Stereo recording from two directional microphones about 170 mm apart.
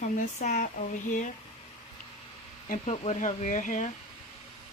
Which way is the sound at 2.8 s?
40° left (ahead or behind).